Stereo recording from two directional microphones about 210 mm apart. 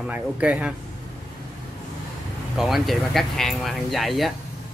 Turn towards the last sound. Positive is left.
turn(degrees=0)  # may be behind; listen again after turning